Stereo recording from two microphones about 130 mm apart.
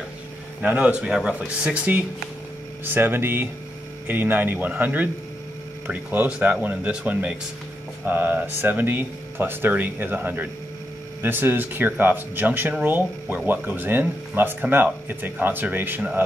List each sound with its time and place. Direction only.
0.6 s speech: 10° right (ahead or behind)